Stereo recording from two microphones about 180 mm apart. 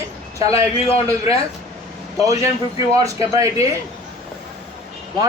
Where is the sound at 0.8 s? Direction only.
35° left (ahead or behind).